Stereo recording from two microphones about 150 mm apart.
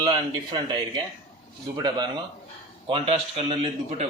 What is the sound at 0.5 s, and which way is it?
Speech, 25° right (ahead or behind).